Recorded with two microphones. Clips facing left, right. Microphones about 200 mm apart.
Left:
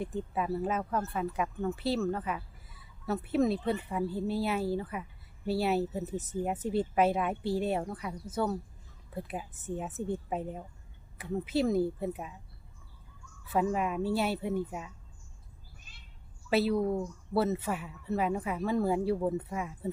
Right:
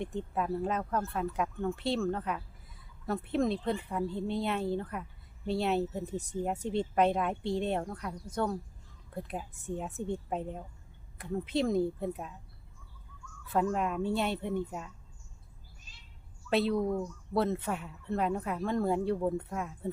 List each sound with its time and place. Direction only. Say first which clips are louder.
0.0 s speech: even; 5° left (ahead or behind)
13.5 s speech: left 1 dB; 5° left (ahead or behind)
15.9 s a sound: left 1 dB; 55° left (ahead or behind)
16.5 s speech: left 1 dB; 5° left (ahead or behind)